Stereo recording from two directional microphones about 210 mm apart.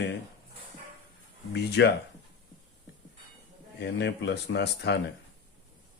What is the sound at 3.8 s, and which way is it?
Speech, 55° left (ahead or behind).